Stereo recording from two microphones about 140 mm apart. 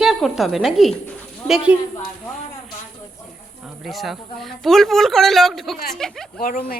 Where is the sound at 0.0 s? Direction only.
Centre (ahead or behind).